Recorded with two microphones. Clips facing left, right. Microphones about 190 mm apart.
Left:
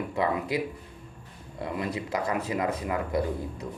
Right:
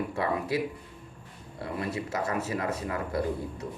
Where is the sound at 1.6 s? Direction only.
20° left (ahead or behind).